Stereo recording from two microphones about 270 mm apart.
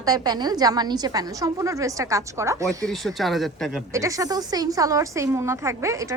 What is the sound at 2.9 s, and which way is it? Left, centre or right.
Speech, centre.